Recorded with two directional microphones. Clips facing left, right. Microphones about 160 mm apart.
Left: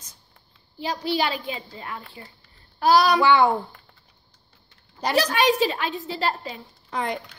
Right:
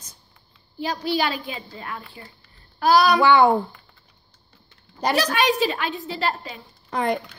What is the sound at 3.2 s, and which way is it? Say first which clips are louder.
Speech: right 2 dB; 50° right (ahead or behind).